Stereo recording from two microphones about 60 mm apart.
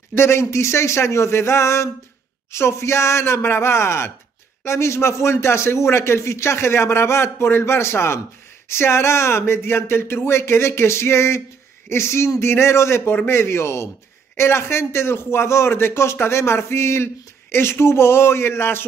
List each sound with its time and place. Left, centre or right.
0.1 s speech: left